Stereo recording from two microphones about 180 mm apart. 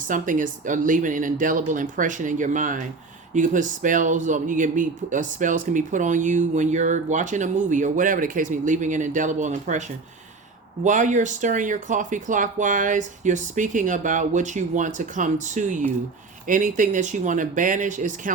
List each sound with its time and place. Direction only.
0.0 s speech: 45° right (ahead or behind)